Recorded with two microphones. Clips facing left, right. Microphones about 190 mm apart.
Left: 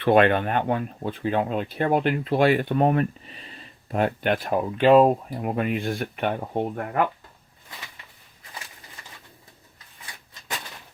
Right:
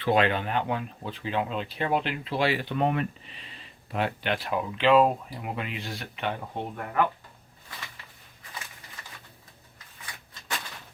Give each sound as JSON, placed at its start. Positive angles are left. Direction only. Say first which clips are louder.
{"t": 0.0, "sound": "speech", "louder": "left 6 dB", "side_deg": 55}